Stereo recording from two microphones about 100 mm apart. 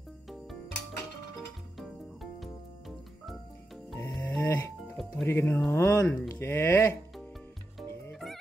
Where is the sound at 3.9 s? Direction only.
5° left (ahead or behind).